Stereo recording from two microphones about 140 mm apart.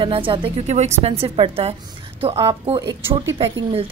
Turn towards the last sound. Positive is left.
turn(degrees=-45)  # may be behind; listen again after turning